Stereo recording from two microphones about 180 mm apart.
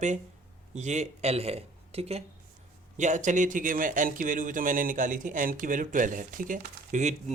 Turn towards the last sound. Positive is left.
turn(degrees=-45)  # may be behind; listen again after turning